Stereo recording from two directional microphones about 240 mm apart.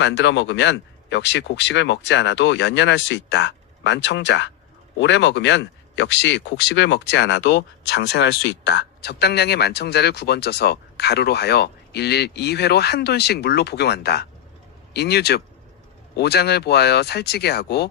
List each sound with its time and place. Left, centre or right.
0.0 s speech: left